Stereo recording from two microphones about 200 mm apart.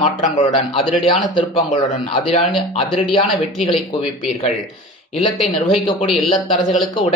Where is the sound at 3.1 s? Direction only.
25° left (ahead or behind).